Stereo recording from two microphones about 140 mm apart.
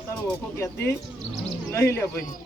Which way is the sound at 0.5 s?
20° left (ahead or behind).